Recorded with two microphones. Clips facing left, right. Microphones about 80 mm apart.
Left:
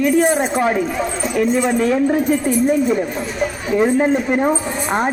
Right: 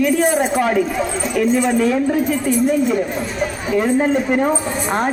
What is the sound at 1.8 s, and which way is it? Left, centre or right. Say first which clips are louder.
Speech: left 1 dB; left.